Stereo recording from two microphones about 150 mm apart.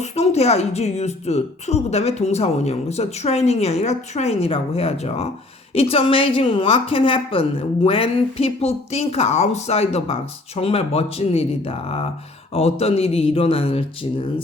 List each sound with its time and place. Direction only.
0.0 s speech: 45° left (ahead or behind)